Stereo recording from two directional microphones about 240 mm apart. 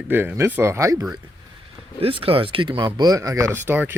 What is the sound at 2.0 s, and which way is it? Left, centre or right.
Speech, right.